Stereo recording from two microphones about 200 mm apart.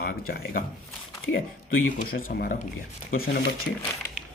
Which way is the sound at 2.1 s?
45° left (ahead or behind).